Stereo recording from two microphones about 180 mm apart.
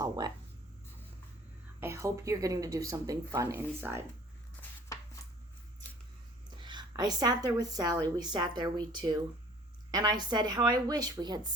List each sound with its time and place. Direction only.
0.0 s a woman's voice: 20° right (ahead or behind)
1.8 s a woman's voice: 15° right (ahead or behind)
4.9 s a sound: 20° left (ahead or behind)
6.6 s a woman's voice: 25° right (ahead or behind)